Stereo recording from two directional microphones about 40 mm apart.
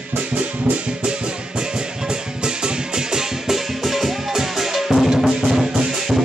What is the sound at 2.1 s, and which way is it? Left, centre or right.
Music, right.